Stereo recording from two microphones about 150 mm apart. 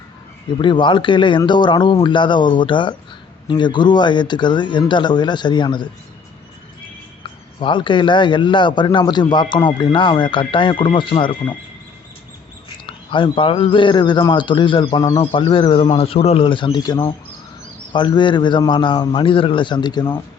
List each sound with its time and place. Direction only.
0.6 s a man's voice: 30° left (ahead or behind)
7.6 s a man's voice: 35° left (ahead or behind)
12.8 s a man's voice: 35° left (ahead or behind)